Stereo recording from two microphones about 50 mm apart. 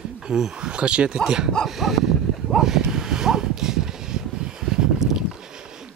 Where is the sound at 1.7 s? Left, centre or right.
Centre.